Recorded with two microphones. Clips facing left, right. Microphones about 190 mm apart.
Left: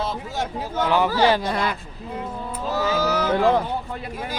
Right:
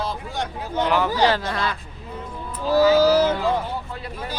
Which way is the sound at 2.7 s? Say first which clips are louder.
Right 8 dB; 35° right (ahead or behind).